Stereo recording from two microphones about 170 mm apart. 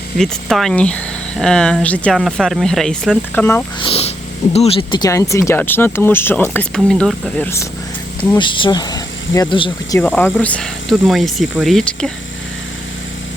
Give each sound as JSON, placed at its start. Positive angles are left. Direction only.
{"t": 0.2, "sound": "speech", "side_deg": 0}
{"t": 3.8, "sound": "a sound", "side_deg": 35}
{"t": 4.5, "sound": "speech", "side_deg": 35}
{"t": 8.4, "sound": "speech", "side_deg": 30}
{"t": 10.0, "sound": "speech", "side_deg": 10}